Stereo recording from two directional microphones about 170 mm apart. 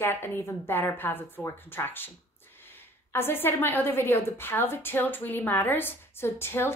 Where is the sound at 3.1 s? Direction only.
15° left (ahead or behind).